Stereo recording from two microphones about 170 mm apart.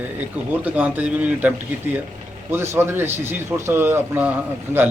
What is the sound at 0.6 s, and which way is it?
Speech, 10° right (ahead or behind).